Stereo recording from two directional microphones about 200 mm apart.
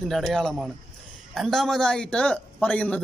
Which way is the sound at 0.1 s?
Centre (ahead or behind).